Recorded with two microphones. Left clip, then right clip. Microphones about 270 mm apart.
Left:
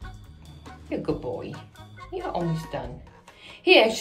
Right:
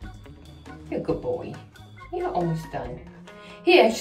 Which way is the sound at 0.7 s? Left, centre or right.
Centre.